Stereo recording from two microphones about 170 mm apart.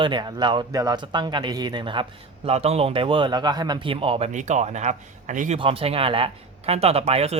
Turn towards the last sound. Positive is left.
turn(degrees=-35)  # may be behind; listen again after turning